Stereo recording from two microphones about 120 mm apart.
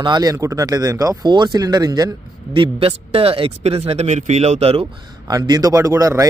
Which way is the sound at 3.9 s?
70° right (ahead or behind).